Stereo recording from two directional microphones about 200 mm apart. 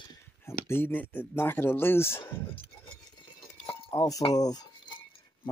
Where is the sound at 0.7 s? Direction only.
10° left (ahead or behind).